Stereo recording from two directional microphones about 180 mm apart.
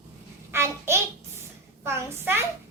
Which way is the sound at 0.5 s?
15° right (ahead or behind).